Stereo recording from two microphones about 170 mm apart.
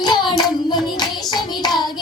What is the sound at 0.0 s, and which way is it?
Child singing, 25° left (ahead or behind).